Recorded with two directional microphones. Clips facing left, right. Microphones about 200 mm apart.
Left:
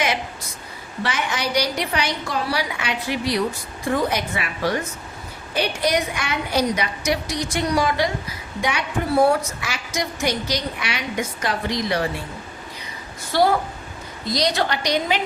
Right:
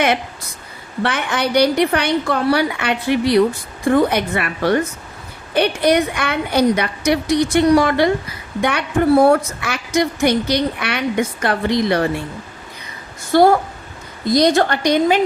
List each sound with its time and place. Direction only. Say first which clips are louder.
1.0 s a woman's voice: right 5 dB; 60° right (ahead or behind)
13.3 s a woman's voice: right 7 dB; 50° right (ahead or behind)